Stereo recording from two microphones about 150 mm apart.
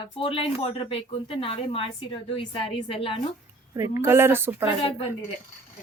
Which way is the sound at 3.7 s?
20° right (ahead or behind).